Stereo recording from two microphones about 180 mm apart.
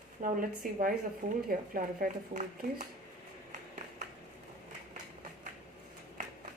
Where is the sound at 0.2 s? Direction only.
50° right (ahead or behind).